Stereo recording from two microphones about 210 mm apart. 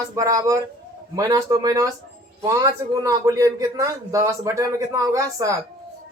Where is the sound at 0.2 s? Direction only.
15° right (ahead or behind).